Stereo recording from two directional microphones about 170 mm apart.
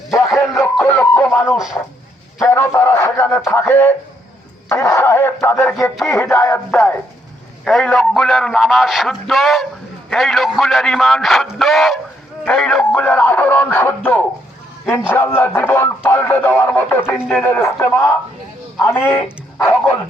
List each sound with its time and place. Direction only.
0.1 s a sound: 20° left (ahead or behind)
1.5 s a man's voice: 5° right (ahead or behind)
2.4 s a man's voice: 15° left (ahead or behind)